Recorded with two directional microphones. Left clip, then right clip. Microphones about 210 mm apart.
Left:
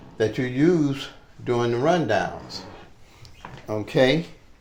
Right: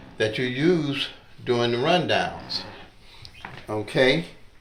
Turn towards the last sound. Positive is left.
turn(degrees=50)  # may be behind; listen again after turning